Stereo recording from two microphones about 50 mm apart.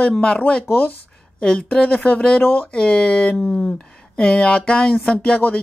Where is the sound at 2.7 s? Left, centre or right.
Centre.